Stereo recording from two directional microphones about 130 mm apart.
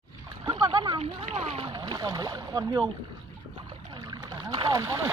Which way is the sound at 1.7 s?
30° right (ahead or behind).